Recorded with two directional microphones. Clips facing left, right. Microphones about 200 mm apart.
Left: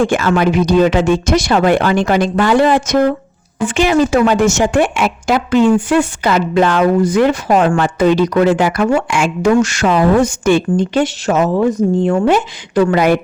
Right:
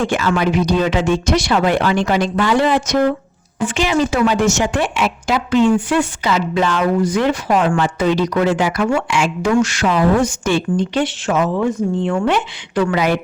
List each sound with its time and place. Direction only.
0.0 s a woman's voice: 50° left (ahead or behind)
10.8 s a woman's voice: 45° left (ahead or behind)